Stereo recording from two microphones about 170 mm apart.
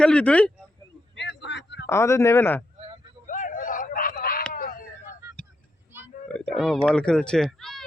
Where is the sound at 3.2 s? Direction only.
50° left (ahead or behind).